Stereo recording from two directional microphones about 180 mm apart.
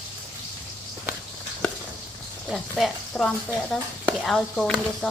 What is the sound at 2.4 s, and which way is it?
Speech, 5° left (ahead or behind).